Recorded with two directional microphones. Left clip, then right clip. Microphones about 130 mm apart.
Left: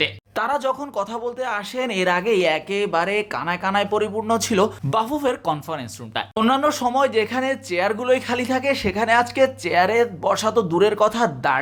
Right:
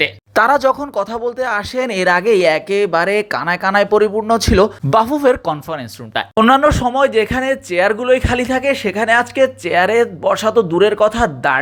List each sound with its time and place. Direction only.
0.3 s speech: 60° right (ahead or behind)
0.6 s speech: 40° right (ahead or behind)
4.9 s speech: 40° right (ahead or behind); by 11.5 s 25° right (ahead or behind)